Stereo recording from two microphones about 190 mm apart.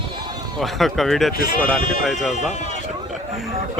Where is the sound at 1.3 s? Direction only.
50° left (ahead or behind).